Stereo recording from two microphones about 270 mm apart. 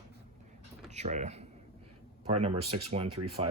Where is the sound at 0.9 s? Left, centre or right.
Right.